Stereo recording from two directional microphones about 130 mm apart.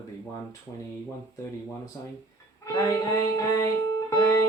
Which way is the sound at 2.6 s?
25° left (ahead or behind).